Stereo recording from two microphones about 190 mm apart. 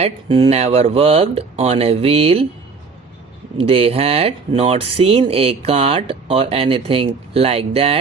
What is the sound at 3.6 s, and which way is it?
Speech, 30° right (ahead or behind).